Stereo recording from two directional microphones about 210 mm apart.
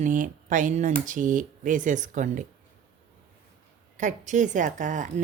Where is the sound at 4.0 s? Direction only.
35° right (ahead or behind).